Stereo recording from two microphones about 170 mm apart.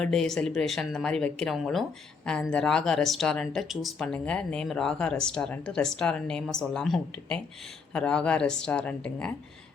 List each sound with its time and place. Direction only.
0.0 s speech: 5° left (ahead or behind)